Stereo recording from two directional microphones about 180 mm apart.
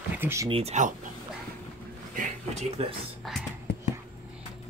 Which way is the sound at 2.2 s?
35° right (ahead or behind).